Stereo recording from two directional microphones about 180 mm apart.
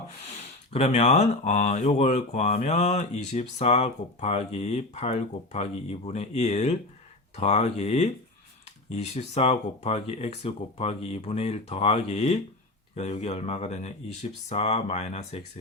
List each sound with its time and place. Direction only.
0.7 s speech: 40° left (ahead or behind)